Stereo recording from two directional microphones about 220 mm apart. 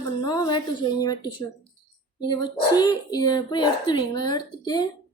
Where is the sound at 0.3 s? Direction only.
20° left (ahead or behind).